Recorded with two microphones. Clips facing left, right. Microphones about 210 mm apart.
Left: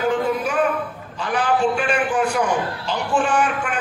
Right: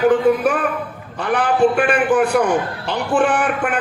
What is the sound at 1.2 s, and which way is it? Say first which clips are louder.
A man's voice: right 4 dB; 60° right (ahead or behind).